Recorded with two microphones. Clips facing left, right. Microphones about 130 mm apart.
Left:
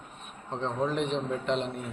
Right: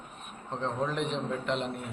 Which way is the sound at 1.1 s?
35° left (ahead or behind).